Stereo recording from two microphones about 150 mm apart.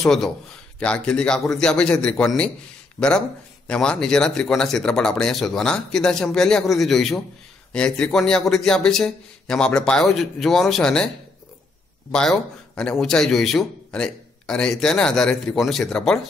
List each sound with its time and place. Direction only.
0.0 s a man's voice: 5° left (ahead or behind)
12.1 s speech: 5° left (ahead or behind)